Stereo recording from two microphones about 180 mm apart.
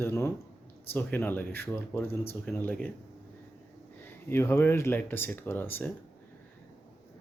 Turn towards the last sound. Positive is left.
turn(degrees=10)  # may be behind; listen again after turning